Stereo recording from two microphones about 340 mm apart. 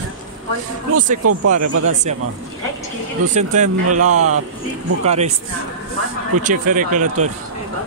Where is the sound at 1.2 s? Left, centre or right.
Right.